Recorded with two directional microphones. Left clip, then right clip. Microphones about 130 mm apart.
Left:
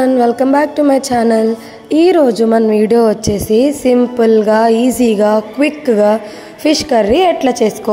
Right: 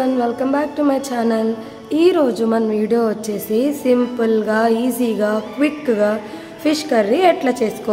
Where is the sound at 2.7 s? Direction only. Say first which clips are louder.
Left 7 dB; 60° left (ahead or behind).